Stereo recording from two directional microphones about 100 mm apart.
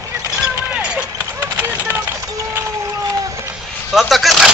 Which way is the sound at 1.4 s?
25° right (ahead or behind).